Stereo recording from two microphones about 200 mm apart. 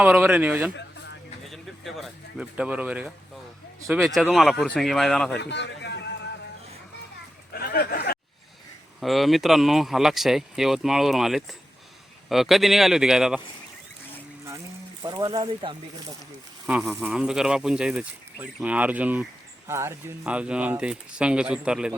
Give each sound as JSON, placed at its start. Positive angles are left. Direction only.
{"t": 0.0, "sound": "speech", "side_deg": -5}
{"t": 5.4, "sound": "a sound", "side_deg": 60}
{"t": 7.5, "sound": "a sound", "side_deg": 50}
{"t": 9.0, "sound": "speech", "side_deg": 0}
{"t": 15.0, "sound": "speech", "side_deg": -20}
{"t": 16.6, "sound": "speech", "side_deg": 0}